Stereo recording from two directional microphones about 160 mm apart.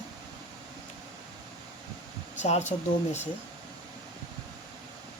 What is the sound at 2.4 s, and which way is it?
Speech, 45° left (ahead or behind).